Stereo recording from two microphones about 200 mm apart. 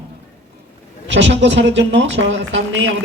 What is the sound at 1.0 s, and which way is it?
Speech, 65° right (ahead or behind).